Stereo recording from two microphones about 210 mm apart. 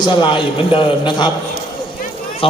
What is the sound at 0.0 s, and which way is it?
A man's voice, 20° left (ahead or behind).